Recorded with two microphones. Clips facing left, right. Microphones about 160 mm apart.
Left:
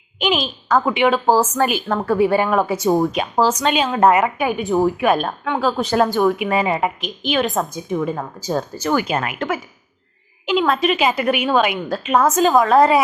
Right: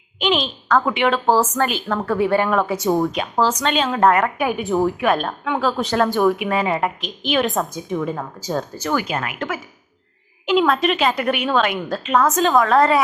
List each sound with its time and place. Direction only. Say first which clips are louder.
0.2 s a woman's voice: even; 5° left (ahead or behind)
8.9 s speech: left 3 dB; 20° left (ahead or behind)
10.4 s a woman's voice: right 1 dB; centre (ahead or behind)